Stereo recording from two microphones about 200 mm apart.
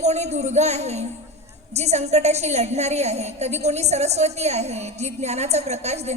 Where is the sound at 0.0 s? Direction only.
35° right (ahead or behind).